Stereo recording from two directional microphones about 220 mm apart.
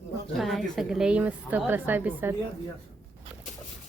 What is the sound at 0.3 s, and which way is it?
A woman's voice, centre (ahead or behind).